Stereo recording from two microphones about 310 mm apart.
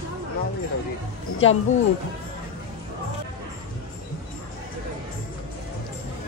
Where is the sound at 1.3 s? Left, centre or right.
Left.